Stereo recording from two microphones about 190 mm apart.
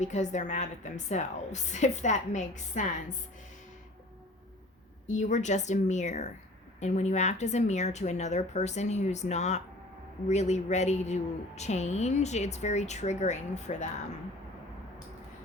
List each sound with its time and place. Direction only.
0.0 s a woman's voice: 40° left (ahead or behind)
5.1 s a woman's voice: 40° left (ahead or behind)